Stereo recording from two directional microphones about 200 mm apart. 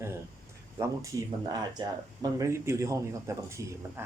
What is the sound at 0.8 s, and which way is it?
Speech, 15° right (ahead or behind).